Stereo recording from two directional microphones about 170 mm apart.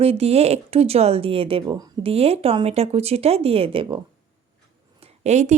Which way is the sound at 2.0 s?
35° right (ahead or behind).